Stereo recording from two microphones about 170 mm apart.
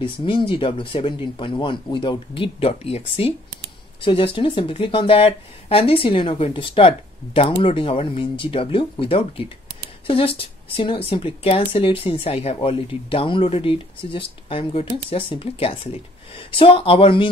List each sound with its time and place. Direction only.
0.0 s a woman's voice: 30° left (ahead or behind)